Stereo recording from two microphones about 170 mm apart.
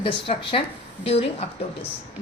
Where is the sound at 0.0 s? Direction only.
30° left (ahead or behind).